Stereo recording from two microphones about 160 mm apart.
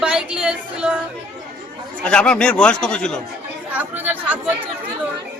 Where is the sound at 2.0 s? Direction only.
5° left (ahead or behind).